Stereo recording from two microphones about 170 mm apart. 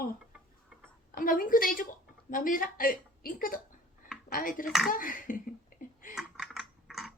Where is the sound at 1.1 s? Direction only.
55° left (ahead or behind).